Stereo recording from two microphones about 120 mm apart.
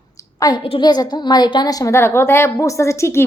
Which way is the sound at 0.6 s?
50° left (ahead or behind).